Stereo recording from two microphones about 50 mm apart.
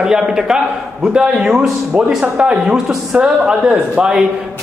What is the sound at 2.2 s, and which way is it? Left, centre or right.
Speech, right.